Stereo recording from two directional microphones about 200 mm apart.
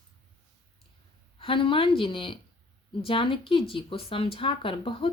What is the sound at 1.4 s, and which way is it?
Speech, 25° left (ahead or behind).